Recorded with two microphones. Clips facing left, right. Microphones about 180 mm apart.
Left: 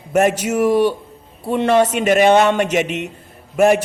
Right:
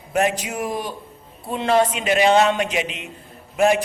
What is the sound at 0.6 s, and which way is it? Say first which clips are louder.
Speech: left 12 dB; 75° left (ahead or behind).